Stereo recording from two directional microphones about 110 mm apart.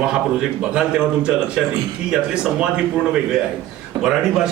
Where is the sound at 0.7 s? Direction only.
10° right (ahead or behind).